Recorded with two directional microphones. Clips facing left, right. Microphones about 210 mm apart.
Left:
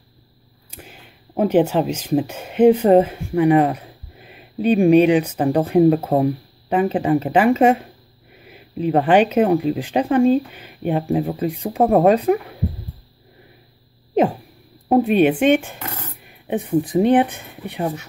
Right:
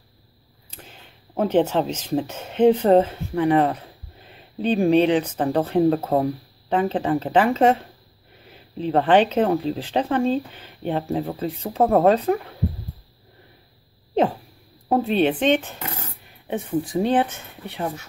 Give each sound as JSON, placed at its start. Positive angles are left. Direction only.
{"t": 0.7, "sound": "speech", "side_deg": 10}
{"t": 14.1, "sound": "a sound", "side_deg": 10}
{"t": 14.9, "sound": "speech", "side_deg": 15}